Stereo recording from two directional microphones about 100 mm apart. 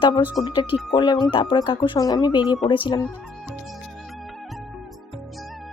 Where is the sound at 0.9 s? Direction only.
50° left (ahead or behind).